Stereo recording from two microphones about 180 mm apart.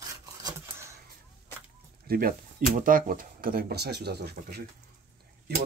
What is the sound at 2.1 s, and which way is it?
Speech, 55° right (ahead or behind).